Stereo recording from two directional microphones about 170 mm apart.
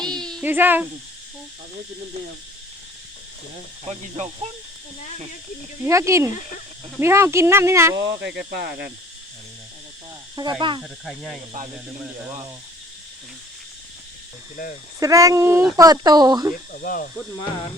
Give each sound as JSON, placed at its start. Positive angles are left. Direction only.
{"t": 0.0, "sound": "a sound", "side_deg": 5}
{"t": 0.4, "sound": "speech", "side_deg": -10}
{"t": 3.8, "sound": "speech", "side_deg": -35}
{"t": 5.8, "sound": "speech", "side_deg": -15}
{"t": 7.9, "sound": "speech", "side_deg": -85}
{"t": 10.6, "sound": "speech", "side_deg": -30}
{"t": 11.0, "sound": "speech", "side_deg": 0}
{"t": 14.9, "sound": "speech", "side_deg": -20}
{"t": 16.7, "sound": "speech", "side_deg": 55}